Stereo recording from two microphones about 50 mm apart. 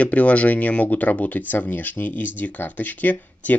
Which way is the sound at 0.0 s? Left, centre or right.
Left.